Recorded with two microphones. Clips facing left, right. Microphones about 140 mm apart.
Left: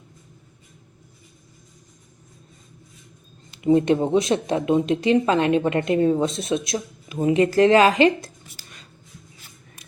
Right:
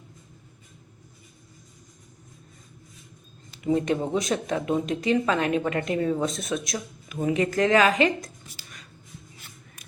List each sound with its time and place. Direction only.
3.7 s speech: 30° left (ahead or behind)